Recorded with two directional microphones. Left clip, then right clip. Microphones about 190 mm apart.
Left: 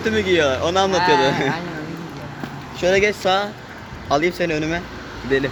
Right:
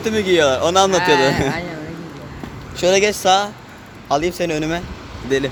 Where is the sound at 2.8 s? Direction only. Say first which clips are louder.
Right 2 dB; 20° right (ahead or behind).